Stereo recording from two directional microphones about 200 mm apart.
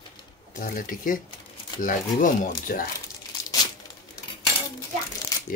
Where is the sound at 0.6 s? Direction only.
40° left (ahead or behind).